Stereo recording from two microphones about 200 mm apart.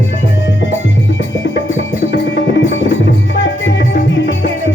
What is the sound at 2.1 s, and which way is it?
Music, 65° left (ahead or behind).